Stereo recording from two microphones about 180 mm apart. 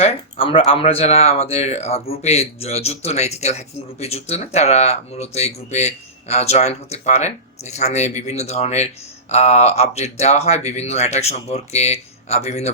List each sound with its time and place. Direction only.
0.0 s speech: 35° left (ahead or behind)